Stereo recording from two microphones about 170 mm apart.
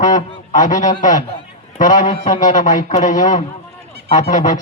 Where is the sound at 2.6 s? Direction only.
50° left (ahead or behind).